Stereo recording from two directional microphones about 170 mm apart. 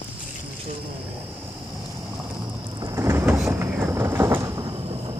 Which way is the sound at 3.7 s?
10° right (ahead or behind).